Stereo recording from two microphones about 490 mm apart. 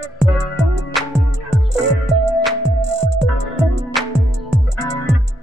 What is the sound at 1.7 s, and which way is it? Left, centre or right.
Music, right.